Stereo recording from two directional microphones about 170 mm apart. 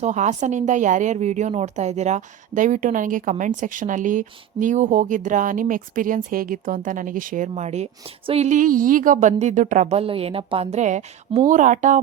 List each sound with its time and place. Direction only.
0.0 s speech: 45° right (ahead or behind)